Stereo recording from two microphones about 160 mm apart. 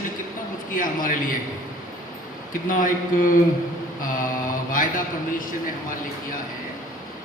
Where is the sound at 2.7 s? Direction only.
60° left (ahead or behind).